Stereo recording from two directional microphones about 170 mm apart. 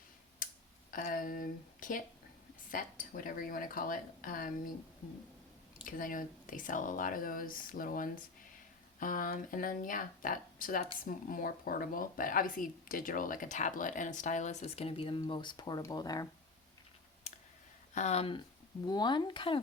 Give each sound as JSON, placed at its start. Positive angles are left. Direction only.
{"t": 0.4, "sound": "a sound", "side_deg": 55}
{"t": 0.9, "sound": "speech", "side_deg": 50}
{"t": 6.0, "sound": "speech", "side_deg": 50}
{"t": 17.9, "sound": "speech", "side_deg": 40}